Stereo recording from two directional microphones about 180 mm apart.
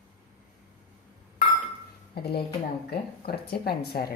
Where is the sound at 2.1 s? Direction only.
60° left (ahead or behind).